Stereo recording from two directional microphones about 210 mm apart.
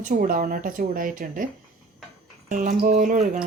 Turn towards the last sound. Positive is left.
turn(degrees=-40)  # may be behind; listen again after turning